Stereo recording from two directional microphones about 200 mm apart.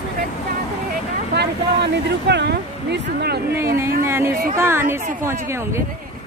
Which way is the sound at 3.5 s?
15° right (ahead or behind).